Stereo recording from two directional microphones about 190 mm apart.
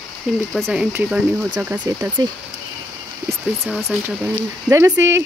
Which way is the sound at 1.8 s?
20° right (ahead or behind).